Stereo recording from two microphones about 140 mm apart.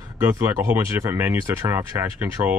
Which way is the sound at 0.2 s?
20° right (ahead or behind).